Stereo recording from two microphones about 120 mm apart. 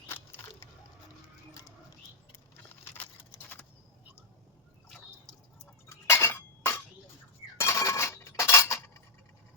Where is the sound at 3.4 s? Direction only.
15° left (ahead or behind).